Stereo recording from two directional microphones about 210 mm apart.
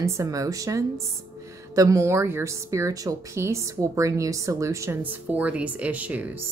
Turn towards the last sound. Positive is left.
turn(degrees=-5)  # may be behind; listen again after turning